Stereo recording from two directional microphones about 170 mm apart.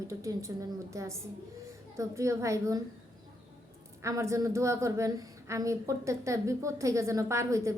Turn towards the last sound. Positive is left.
turn(degrees=-15)  # may be behind; listen again after turning